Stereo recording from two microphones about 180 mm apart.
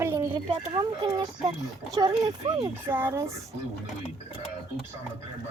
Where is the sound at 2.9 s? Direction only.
10° right (ahead or behind).